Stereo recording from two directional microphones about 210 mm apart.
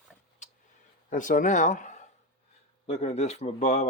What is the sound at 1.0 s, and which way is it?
Speech, 40° left (ahead or behind).